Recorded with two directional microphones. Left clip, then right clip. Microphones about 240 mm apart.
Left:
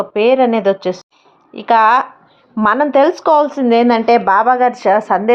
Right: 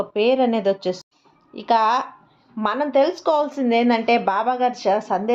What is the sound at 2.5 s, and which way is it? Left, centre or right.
Speech, left.